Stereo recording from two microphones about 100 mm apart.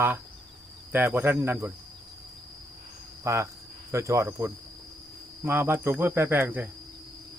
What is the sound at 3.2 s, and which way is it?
Speech, 30° right (ahead or behind).